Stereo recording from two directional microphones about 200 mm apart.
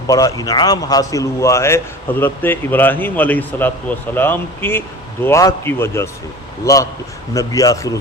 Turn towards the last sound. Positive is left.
turn(degrees=15)  # may be behind; listen again after turning